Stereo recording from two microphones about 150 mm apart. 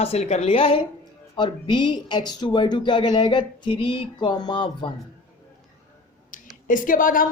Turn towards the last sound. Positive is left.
turn(degrees=65)  # may be behind; listen again after turning